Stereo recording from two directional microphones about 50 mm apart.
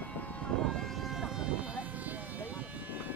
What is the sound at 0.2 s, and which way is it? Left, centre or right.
Vehicle, left.